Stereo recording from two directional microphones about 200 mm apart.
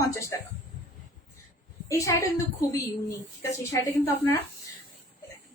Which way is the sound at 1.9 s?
15° left (ahead or behind).